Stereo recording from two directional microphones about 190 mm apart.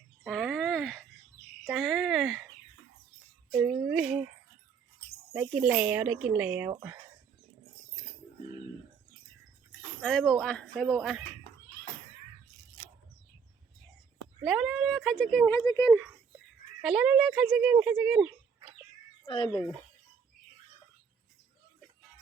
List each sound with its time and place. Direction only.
0.3 s a sound: centre (ahead or behind)
3.5 s child singing: 10° right (ahead or behind)
5.3 s speech: 5° right (ahead or behind)
10.0 s speech: 5° left (ahead or behind)
14.4 s speech: centre (ahead or behind)
15.5 s speech: 15° left (ahead or behind)
16.8 s speech: 5° right (ahead or behind)
19.2 s speech: 25° left (ahead or behind)
19.5 s speech: 5° left (ahead or behind)